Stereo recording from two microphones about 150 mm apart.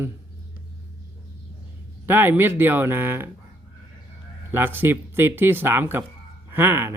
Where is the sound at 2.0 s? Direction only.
15° right (ahead or behind).